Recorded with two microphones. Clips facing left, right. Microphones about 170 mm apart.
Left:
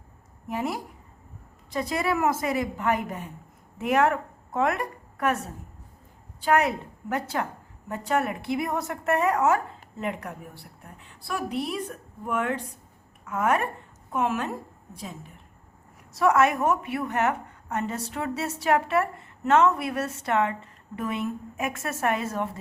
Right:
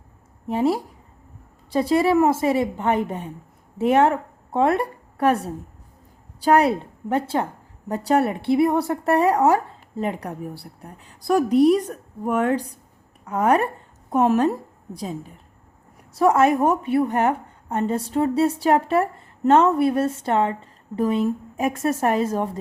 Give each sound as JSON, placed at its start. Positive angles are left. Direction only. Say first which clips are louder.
{"t": 0.4, "sound": "a woman's voice", "louder": "right 9 dB", "side_deg": -30}
{"t": 16.1, "sound": "a woman's voice", "louder": "right 4 dB", "side_deg": -30}